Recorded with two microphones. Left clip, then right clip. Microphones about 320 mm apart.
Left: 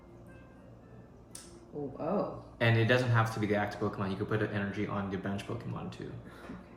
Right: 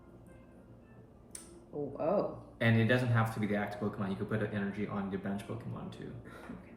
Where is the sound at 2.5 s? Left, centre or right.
Centre.